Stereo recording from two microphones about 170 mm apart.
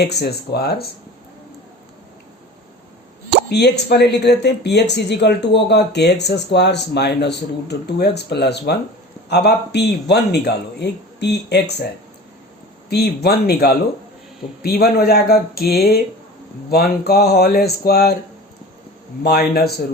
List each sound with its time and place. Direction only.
0.0 s speech: 75° left (ahead or behind)
3.5 s speech: 75° left (ahead or behind)
12.9 s speech: 70° left (ahead or behind)
19.2 s speech: 65° left (ahead or behind)